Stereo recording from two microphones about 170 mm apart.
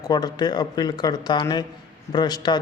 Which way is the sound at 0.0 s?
25° left (ahead or behind).